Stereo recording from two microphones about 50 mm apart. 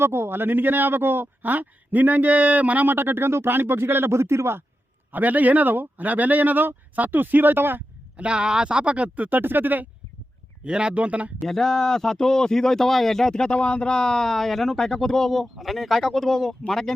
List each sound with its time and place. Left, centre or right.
0.0 s speech: right
5.1 s speech: right
8.1 s speech: right
10.6 s speech: centre
11.4 s speech: centre